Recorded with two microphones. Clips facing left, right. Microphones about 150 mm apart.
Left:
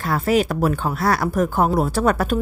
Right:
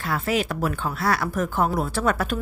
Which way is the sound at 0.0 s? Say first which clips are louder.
Left 6 dB; 40° left (ahead or behind).